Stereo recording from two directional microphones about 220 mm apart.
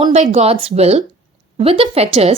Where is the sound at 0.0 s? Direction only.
30° right (ahead or behind).